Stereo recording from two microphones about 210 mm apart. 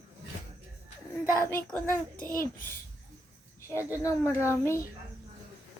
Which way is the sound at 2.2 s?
40° left (ahead or behind).